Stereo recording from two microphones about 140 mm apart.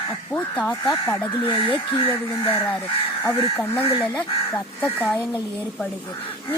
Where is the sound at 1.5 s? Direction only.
40° left (ahead or behind).